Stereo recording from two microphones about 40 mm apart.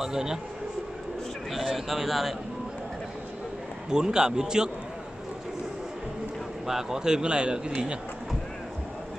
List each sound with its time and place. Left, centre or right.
0.0 s a man's voice: centre
1.5 s a man's voice: centre
3.9 s a man's voice: centre
6.7 s a man's voice: centre